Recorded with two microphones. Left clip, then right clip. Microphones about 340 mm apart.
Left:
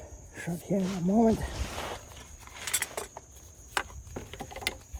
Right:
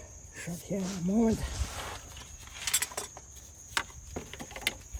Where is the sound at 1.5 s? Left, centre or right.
Left.